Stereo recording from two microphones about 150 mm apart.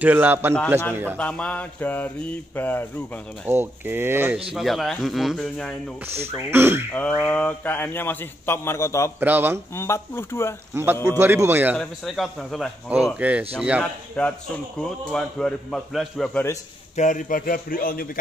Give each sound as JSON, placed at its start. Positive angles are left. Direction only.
{"t": 0.0, "sound": "speech", "side_deg": -10}
{"t": 1.1, "sound": "a man's voice", "side_deg": 10}
{"t": 3.4, "sound": "speech", "side_deg": -15}
{"t": 4.6, "sound": "a man's voice", "side_deg": 0}
{"t": 6.5, "sound": "speech", "side_deg": -15}
{"t": 6.9, "sound": "a man's voice", "side_deg": 10}
{"t": 9.2, "sound": "speech", "side_deg": -15}
{"t": 9.8, "sound": "a man's voice", "side_deg": 20}
{"t": 10.7, "sound": "speech", "side_deg": -20}
{"t": 11.7, "sound": "a man's voice", "side_deg": 5}
{"t": 13.2, "sound": "speech", "side_deg": -10}
{"t": 14.2, "sound": "a man's voice", "side_deg": 5}
{"t": 16.9, "sound": "speech", "side_deg": 55}